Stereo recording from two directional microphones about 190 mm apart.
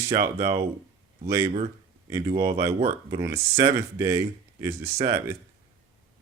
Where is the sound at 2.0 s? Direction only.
20° right (ahead or behind).